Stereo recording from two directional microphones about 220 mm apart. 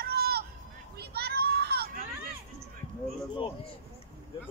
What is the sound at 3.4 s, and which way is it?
Speech, 25° left (ahead or behind).